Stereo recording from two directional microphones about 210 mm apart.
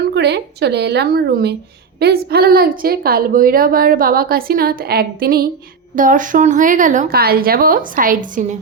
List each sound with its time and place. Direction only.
0.1 s a woman's voice: 50° right (ahead or behind)